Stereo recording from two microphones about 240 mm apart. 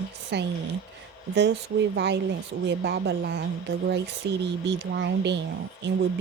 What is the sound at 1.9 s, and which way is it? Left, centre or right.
Speech, right.